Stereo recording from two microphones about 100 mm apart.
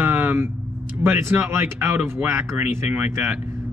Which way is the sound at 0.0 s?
20° right (ahead or behind).